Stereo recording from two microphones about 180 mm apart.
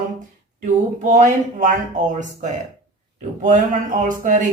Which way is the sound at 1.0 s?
45° right (ahead or behind).